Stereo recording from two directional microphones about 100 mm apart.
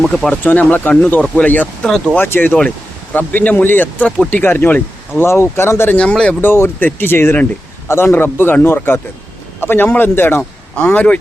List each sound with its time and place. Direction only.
0.1 s speech: 10° left (ahead or behind)
6.0 s speech: 10° left (ahead or behind)
6.5 s speech: 20° left (ahead or behind)